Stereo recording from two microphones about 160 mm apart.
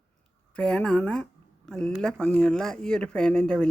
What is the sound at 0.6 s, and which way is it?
Speech, 5° left (ahead or behind).